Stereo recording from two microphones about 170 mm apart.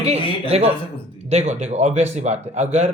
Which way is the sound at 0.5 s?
40° right (ahead or behind).